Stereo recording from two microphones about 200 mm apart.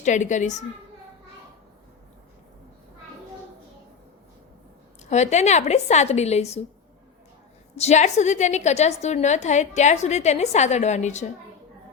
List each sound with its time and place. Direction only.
0.0 s a woman's voice: 35° left (ahead or behind)
5.0 s a woman's voice: 35° left (ahead or behind)
7.8 s a woman's voice: 35° left (ahead or behind)